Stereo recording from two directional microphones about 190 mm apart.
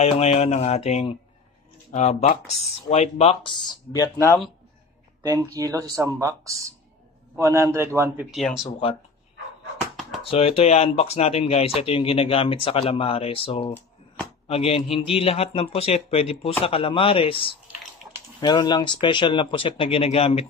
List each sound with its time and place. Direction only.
0.0 s a man's voice: 35° left (ahead or behind); by 4.4 s 15° left (ahead or behind)
5.2 s speech: 15° right (ahead or behind)
8.3 s speech: centre (ahead or behind)
9.9 s a sound: centre (ahead or behind)
10.3 s a man's voice: 30° left (ahead or behind)